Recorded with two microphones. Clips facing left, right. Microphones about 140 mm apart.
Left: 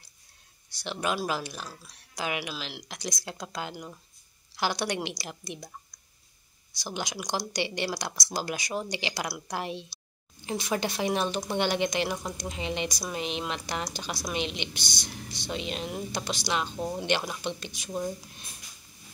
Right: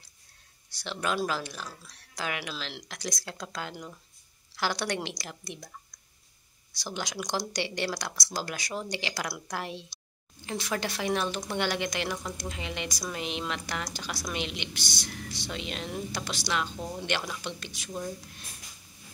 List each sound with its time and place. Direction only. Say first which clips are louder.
0.7 s speech: left 1 dB; 15° left (ahead or behind)
2.5 s speech: left 1 dB; 5° left (ahead or behind)